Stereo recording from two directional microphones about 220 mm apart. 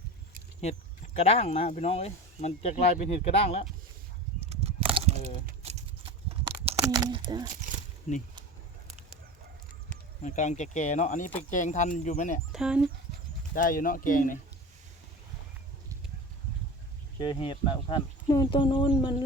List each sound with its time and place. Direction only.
0.6 s speech: 30° left (ahead or behind)
4.4 s a sound: 25° right (ahead or behind)
7.0 s speech: 20° right (ahead or behind)
10.2 s speech: 35° left (ahead or behind)
12.5 s speech: 5° right (ahead or behind)
13.5 s speech: 40° left (ahead or behind)
17.2 s speech: 25° left (ahead or behind)